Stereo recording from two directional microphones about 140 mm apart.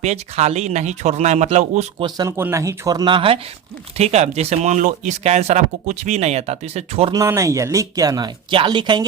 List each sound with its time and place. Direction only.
0.0 s speech: 55° right (ahead or behind)
2.0 s speech: 30° right (ahead or behind)
2.3 s speech: 20° right (ahead or behind); by 3.4 s 40° right (ahead or behind)
3.9 s speech: 50° right (ahead or behind)
7.1 s speech: 25° right (ahead or behind)